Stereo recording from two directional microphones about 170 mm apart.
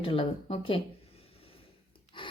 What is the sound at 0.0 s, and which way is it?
Speech, 30° left (ahead or behind).